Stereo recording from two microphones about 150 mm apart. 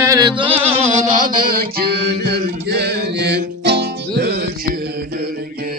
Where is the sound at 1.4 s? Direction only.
75° right (ahead or behind).